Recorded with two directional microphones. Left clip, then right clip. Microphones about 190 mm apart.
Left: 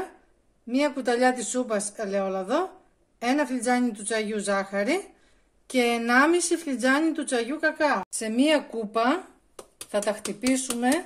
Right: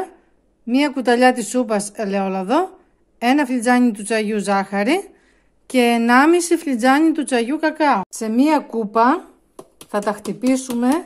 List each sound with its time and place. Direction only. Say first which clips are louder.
0.7 s a woman's voice: right 7 dB; 45° right (ahead or behind)
8.1 s speech: right 6 dB; 30° right (ahead or behind)